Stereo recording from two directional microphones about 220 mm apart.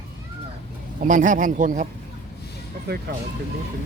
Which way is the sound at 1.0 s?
35° right (ahead or behind).